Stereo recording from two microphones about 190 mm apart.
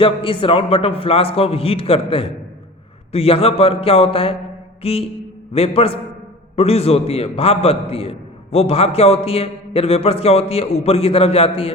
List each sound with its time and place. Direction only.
0.0 s a man's voice: 30° left (ahead or behind)
4.8 s mantra: 30° left (ahead or behind)
5.5 s a man's voice: 30° left (ahead or behind)